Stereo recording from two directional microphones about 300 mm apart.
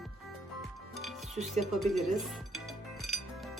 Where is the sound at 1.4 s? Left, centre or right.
Centre.